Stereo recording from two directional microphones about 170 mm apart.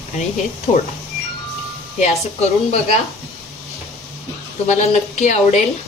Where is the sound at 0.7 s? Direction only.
40° left (ahead or behind).